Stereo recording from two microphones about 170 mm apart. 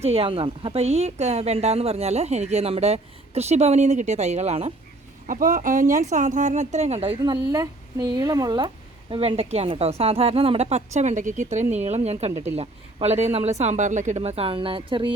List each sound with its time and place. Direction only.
0.0 s a woman's voice: 35° right (ahead or behind)
5.2 s speech: 50° right (ahead or behind); by 7.3 s 35° right (ahead or behind)
7.5 s a woman's voice: 20° right (ahead or behind); by 12.3 s 35° right (ahead or behind)
12.3 s speech: 15° right (ahead or behind)
12.5 s a woman's voice: 40° right (ahead or behind)